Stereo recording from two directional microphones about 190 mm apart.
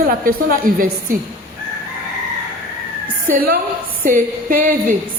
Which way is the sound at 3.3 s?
50° right (ahead or behind).